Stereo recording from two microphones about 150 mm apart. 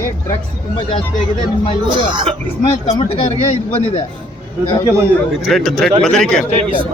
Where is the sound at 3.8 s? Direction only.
45° left (ahead or behind).